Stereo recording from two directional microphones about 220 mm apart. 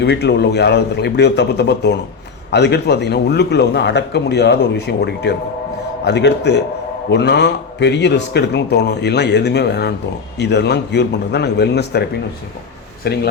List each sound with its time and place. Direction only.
0.0 s a man's voice: 50° left (ahead or behind)
13.0 s a man's voice: 45° left (ahead or behind)